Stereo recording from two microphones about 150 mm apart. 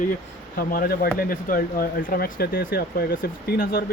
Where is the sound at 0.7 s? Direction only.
80° left.